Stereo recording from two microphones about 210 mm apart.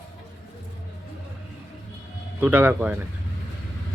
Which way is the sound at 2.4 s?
5° right (ahead or behind).